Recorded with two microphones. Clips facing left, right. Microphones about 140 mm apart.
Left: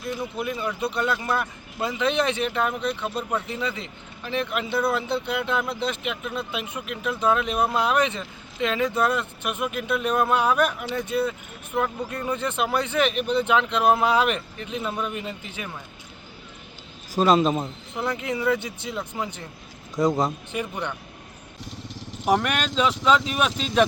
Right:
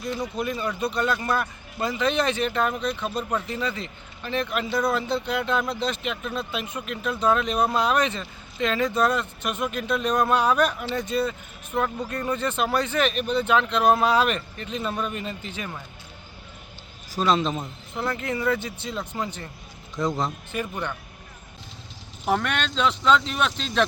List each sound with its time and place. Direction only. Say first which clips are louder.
0.0 s speech: right 1 dB; 5° left (ahead or behind)
17.2 s a man's voice: left 4 dB; 45° left (ahead or behind)
17.9 s speech: even; 10° left (ahead or behind)
20.5 s speech: even; 15° left (ahead or behind)
22.3 s speech: left 2 dB; 10° left (ahead or behind)